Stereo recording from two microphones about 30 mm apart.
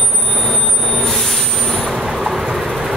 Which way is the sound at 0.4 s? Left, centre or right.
Centre.